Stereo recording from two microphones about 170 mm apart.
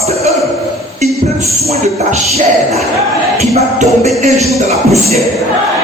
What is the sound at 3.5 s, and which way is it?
Music, 40° right (ahead or behind).